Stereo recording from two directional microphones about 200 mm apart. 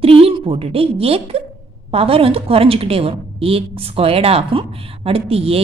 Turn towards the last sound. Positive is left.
turn(degrees=-30)  # may be behind; listen again after turning